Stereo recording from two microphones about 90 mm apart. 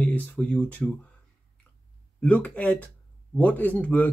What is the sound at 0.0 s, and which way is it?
Speech, 15° left (ahead or behind).